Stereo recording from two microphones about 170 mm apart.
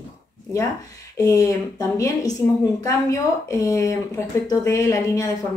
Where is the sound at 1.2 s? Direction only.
20° left (ahead or behind).